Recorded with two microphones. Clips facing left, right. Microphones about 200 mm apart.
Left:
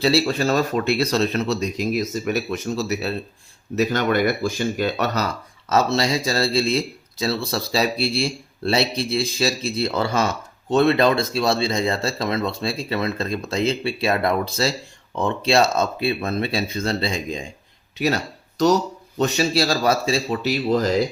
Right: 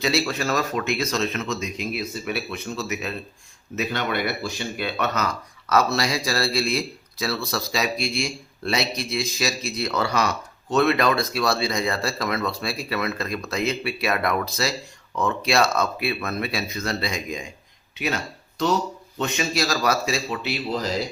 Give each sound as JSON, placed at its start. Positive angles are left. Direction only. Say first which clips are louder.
{"t": 0.0, "sound": "speech", "louder": "left 5 dB", "side_deg": 30}